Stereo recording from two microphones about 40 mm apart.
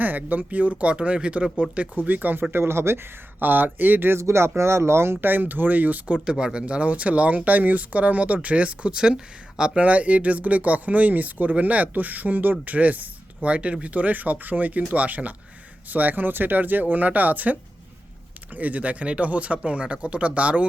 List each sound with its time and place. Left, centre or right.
0.0 s speech: right
2.0 s speech: right
2.4 s speech: right
3.4 s speech: right
4.1 s speech: right
5.2 s speech: right
6.2 s speech: centre
9.0 s speech: centre